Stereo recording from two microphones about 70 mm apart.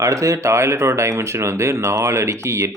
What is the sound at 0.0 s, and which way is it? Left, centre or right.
Speech, right.